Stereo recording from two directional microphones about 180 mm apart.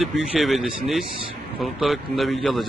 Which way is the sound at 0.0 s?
Centre (ahead or behind).